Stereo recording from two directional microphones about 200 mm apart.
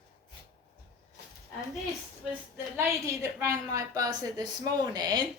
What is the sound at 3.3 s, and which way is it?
Speech, 15° right (ahead or behind).